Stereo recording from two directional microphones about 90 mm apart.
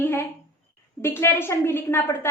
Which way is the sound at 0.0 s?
25° left (ahead or behind).